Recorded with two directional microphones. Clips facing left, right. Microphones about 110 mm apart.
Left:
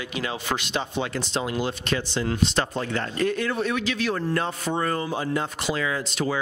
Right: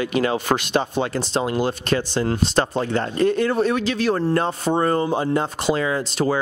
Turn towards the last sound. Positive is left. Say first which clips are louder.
# right 5 dB
turn(degrees=-35)  # may be behind; listen again after turning